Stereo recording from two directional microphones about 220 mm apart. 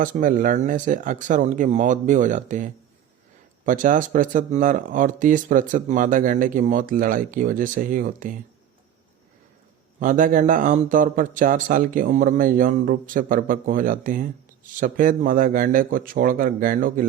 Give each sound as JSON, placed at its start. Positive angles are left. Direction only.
{"t": 0.0, "sound": "speech", "side_deg": -35}
{"t": 10.0, "sound": "speech", "side_deg": -35}